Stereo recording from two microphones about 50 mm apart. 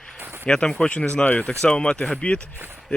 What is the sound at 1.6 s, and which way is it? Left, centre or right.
Speech, centre.